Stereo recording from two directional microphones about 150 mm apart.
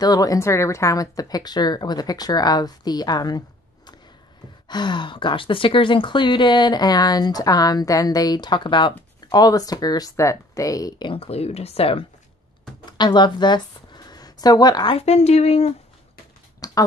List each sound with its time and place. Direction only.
0.0 s speech: 25° left (ahead or behind)
15.0 s speech: 45° left (ahead or behind)
16.6 s a sound: 25° left (ahead or behind)